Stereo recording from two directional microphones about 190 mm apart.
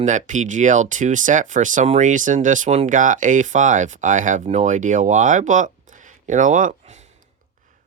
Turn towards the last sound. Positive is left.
turn(degrees=-40)  # may be behind; listen again after turning